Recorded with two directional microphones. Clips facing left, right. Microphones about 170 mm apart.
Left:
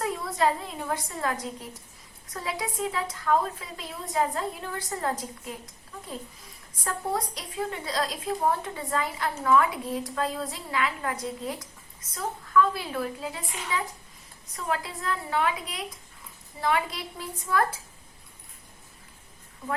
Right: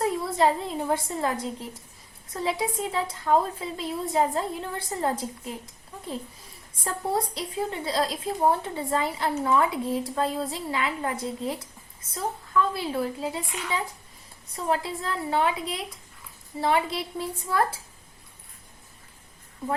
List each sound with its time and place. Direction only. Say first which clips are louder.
0.0 s a woman's voice: right 3 dB; 30° right (ahead or behind)
6.8 s a woman's voice: right 2 dB; 30° right (ahead or behind)